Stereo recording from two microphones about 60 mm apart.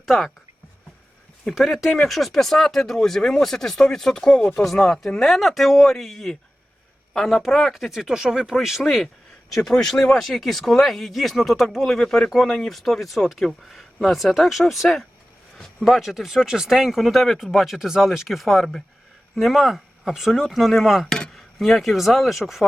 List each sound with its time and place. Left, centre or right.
0.0 s speech: centre
1.5 s speech: centre
4.6 s speech: centre
11.9 s speech: centre